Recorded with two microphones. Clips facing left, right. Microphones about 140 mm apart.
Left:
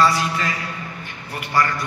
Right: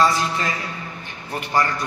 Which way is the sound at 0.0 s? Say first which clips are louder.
Even; 25° right (ahead or behind).